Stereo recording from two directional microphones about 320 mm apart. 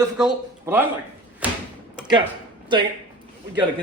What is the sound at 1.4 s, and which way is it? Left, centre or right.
Door, centre.